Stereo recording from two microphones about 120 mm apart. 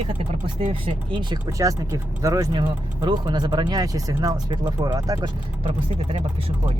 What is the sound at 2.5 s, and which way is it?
Speech, 40° right (ahead or behind).